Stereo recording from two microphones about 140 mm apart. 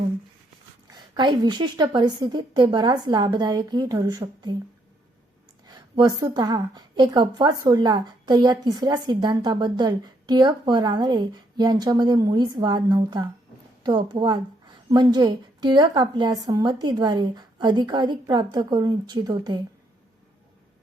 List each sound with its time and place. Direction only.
1.1 s a woman's voice: 30° right (ahead or behind)
5.6 s a woman's voice: 30° right (ahead or behind)